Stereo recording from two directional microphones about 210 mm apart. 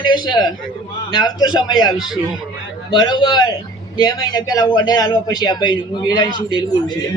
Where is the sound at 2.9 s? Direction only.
20° left (ahead or behind).